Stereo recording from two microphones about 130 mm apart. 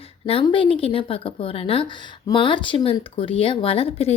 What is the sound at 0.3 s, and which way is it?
Speech, 45° left (ahead or behind).